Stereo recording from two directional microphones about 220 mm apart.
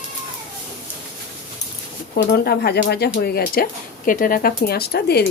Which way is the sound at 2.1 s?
45° left (ahead or behind).